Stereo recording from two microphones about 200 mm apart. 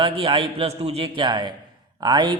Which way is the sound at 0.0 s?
25° right (ahead or behind).